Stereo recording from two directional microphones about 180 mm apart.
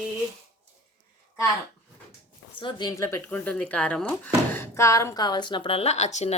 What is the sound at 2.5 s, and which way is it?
Speech, 25° left (ahead or behind).